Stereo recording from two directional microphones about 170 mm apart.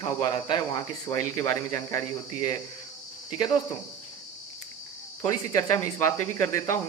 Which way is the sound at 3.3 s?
25° left (ahead or behind).